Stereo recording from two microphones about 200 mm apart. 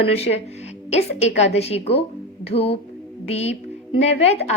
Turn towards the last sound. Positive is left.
turn(degrees=30)  # may be behind; listen again after turning